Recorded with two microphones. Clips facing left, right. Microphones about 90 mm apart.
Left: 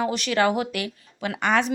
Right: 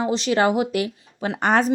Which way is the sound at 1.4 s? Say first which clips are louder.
Right 3 dB; 40° right (ahead or behind).